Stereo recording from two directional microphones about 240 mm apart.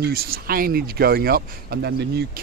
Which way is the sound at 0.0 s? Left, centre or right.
Right.